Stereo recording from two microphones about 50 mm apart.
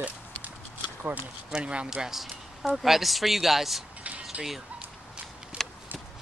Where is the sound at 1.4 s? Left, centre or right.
Centre.